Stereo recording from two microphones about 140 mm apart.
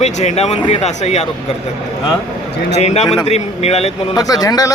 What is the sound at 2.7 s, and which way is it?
Speech, 50° left (ahead or behind).